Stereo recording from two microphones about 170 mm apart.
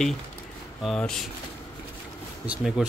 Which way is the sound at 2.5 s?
5° right (ahead or behind).